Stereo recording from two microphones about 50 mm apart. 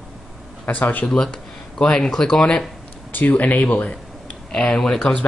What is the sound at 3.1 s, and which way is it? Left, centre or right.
Speech, left.